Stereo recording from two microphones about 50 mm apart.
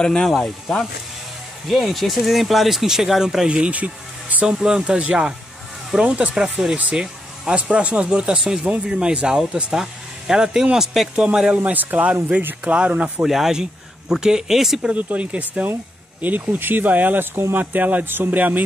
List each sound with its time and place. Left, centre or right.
0.0 s speech: centre
1.7 s speech: centre
3.4 s speech: right
4.5 s speech: centre
11.2 s speech: centre
11.6 s speech: right
12.7 s speech: right
13.2 s speech: centre
14.9 s speech: right
16.2 s speech: right